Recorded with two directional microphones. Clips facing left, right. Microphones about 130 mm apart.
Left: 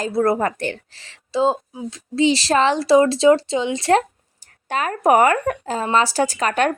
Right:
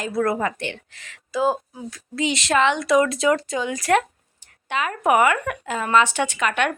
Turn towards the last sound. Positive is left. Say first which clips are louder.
# left 3 dB
turn(degrees=35)  # may be behind; listen again after turning